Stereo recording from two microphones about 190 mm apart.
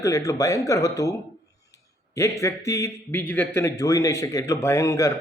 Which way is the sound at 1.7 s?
15° left (ahead or behind).